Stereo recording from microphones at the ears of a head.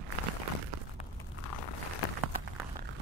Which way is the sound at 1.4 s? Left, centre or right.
Left.